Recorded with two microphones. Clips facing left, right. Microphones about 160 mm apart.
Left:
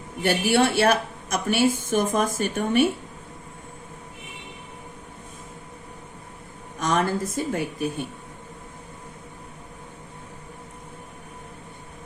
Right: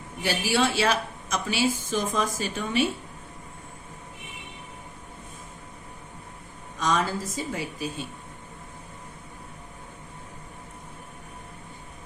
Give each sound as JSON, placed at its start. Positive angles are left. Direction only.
{"t": 0.2, "sound": "a woman's voice", "side_deg": 60}
{"t": 6.7, "sound": "a woman's voice", "side_deg": 55}